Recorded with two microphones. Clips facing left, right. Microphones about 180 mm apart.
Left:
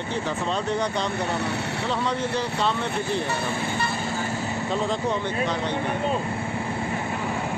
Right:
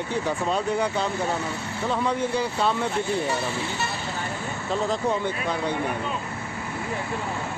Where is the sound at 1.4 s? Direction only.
70° left (ahead or behind).